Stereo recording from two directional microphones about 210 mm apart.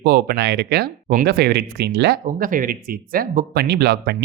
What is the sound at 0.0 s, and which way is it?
Speech, 50° right (ahead or behind).